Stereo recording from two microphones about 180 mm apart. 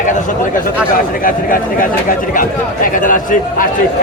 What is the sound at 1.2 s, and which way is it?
A man's voice, 50° left (ahead or behind).